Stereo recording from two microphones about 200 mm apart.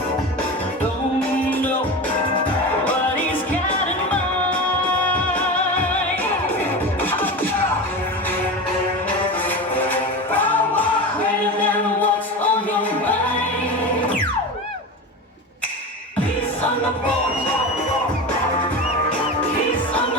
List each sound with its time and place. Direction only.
5.0 s music: 10° left (ahead or behind)
7.0 s music: 10° left (ahead or behind)
9.7 s music: 10° left (ahead or behind)